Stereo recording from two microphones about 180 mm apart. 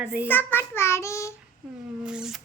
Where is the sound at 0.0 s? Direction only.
5° right (ahead or behind).